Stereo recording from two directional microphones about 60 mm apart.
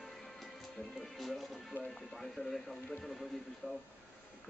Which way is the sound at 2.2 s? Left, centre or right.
Centre.